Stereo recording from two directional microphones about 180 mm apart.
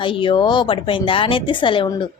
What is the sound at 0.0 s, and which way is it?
A woman's voice, 30° left (ahead or behind).